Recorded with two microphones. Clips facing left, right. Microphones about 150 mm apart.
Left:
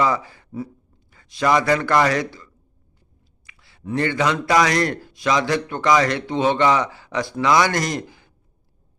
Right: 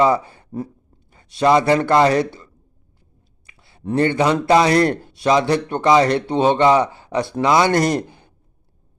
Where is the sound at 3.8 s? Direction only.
30° right (ahead or behind).